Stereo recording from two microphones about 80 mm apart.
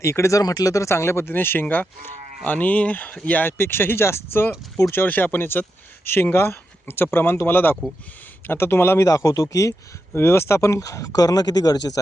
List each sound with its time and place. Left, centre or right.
0.0 s speech: left
9.0 s speech: left
10.1 s speech: left